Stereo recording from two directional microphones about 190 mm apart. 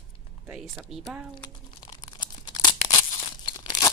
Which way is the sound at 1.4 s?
20° left (ahead or behind).